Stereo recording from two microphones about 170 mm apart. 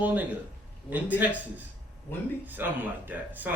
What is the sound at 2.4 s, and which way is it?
A man's voice, 10° right (ahead or behind).